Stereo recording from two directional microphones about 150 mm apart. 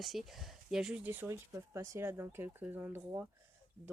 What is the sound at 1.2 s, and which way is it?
Speech, 20° right (ahead or behind).